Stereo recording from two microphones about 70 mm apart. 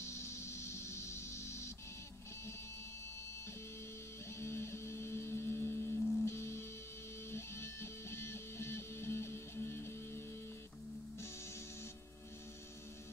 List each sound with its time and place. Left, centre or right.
0.0 s music: left
4.4 s music: left